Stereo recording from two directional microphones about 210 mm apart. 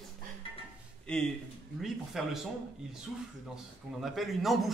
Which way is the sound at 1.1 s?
5° left (ahead or behind).